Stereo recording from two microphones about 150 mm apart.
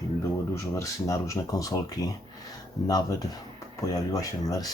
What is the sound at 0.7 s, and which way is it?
Speech, 20° left (ahead or behind).